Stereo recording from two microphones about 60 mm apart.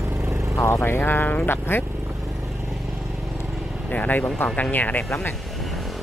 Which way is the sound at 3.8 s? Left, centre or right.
Left.